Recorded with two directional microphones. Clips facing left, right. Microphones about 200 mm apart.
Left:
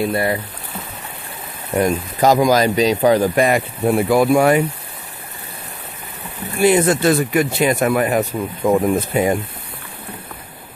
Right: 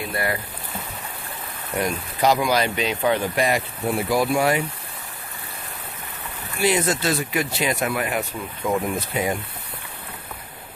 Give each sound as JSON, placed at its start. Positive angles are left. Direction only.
{"t": 0.1, "sound": "speech", "side_deg": 25}
{"t": 1.8, "sound": "speech", "side_deg": 45}
{"t": 3.4, "sound": "speech", "side_deg": 55}
{"t": 6.6, "sound": "speech", "side_deg": 50}